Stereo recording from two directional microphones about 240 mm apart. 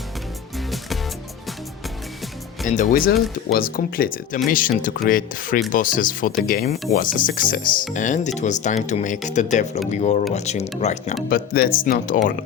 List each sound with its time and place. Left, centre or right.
2.6 s speech: left